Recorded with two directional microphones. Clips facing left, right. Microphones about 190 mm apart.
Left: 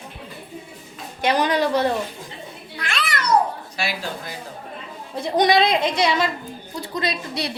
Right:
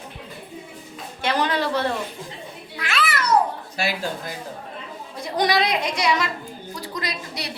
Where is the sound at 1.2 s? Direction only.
15° left (ahead or behind).